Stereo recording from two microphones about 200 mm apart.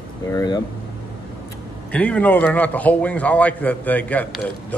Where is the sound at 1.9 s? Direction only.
5° left (ahead or behind).